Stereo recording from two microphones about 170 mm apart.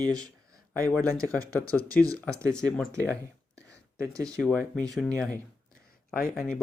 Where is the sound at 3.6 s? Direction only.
20° right (ahead or behind).